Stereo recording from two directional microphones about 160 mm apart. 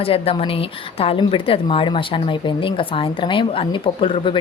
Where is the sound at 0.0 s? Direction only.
35° left (ahead or behind).